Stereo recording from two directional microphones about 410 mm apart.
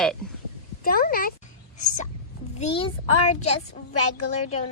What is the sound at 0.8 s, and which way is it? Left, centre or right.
Speech, left.